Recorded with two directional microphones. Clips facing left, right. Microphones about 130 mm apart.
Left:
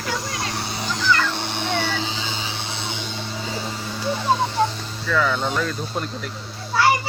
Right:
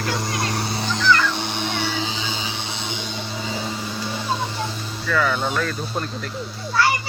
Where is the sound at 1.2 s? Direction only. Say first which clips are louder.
Right 1 dB; 15° right (ahead or behind).